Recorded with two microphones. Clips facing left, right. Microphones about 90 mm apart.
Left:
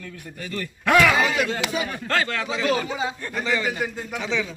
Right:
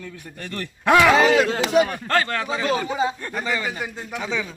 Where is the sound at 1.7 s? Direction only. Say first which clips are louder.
Right 14 dB; 65° right (ahead or behind).